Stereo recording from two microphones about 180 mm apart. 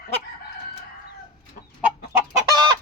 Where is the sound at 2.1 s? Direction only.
25° right (ahead or behind).